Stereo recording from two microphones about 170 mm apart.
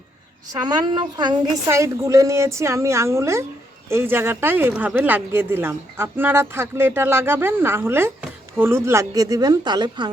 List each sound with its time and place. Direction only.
0.6 s speech: 25° right (ahead or behind)